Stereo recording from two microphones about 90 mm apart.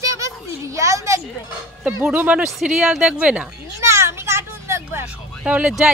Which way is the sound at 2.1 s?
15° right (ahead or behind).